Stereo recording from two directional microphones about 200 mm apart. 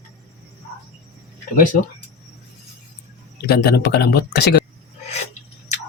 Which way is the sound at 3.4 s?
50° left (ahead or behind).